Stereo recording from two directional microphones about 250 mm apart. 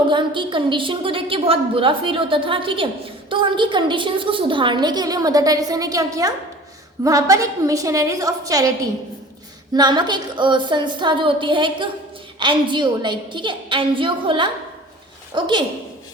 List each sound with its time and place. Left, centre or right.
0.1 s a woman's voice: centre